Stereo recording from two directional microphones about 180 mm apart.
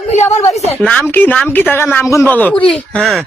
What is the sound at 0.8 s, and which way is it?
Speech, 5° left (ahead or behind).